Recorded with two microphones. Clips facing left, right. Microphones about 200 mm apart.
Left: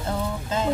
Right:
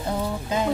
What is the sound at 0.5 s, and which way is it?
Music, 15° right (ahead or behind).